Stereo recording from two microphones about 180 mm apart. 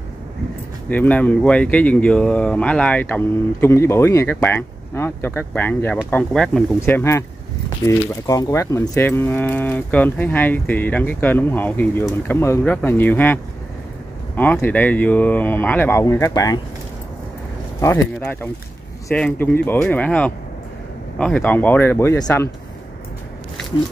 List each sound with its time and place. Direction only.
0.8 s speech: 10° left (ahead or behind)
8.3 s speech: 20° left (ahead or behind)
17.7 s speech: 15° left (ahead or behind)